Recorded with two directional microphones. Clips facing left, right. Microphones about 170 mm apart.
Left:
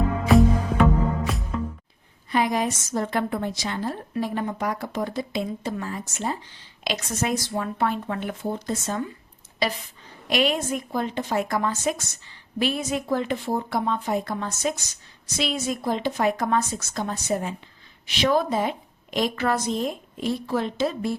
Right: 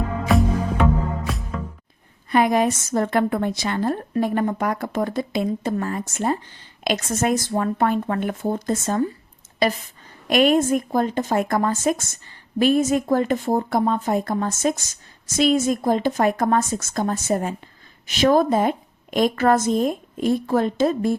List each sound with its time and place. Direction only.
0.3 s music: centre (ahead or behind)
2.3 s a woman's voice: 55° right (ahead or behind)